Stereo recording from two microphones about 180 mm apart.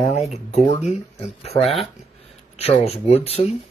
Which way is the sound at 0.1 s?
35° left (ahead or behind).